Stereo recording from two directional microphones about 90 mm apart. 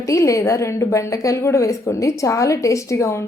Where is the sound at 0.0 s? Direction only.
35° left (ahead or behind).